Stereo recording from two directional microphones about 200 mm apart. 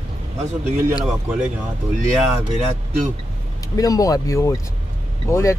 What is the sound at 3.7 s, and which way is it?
Speech, 15° left (ahead or behind).